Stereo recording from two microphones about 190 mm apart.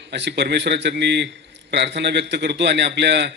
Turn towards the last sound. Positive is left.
turn(degrees=-65)  # may be behind; listen again after turning